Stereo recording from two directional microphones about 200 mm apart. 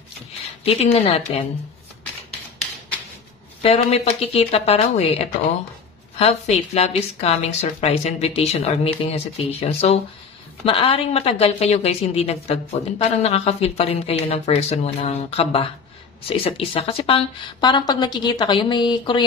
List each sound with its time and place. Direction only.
0.7 s a woman's voice: 30° left (ahead or behind)
3.6 s a woman's voice: 30° left (ahead or behind)